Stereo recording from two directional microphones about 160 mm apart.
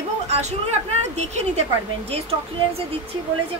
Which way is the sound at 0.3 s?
45° right (ahead or behind).